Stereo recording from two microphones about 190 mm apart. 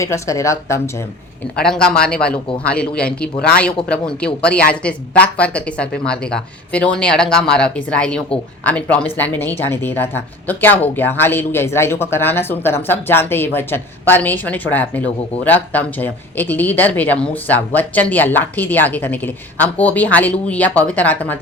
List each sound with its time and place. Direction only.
0.0 s speech: 15° left (ahead or behind)
1.5 s a man's voice: 5° left (ahead or behind)